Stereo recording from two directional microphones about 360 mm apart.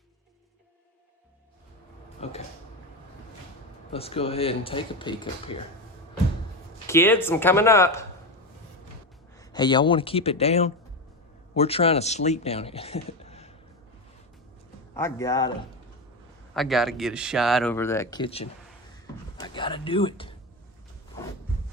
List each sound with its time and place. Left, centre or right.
2.2 s speech: centre
3.9 s speech: centre
6.8 s speech: centre
9.4 s speech: centre
14.9 s speech: centre
16.6 s speech: centre
19.0 s a sound: centre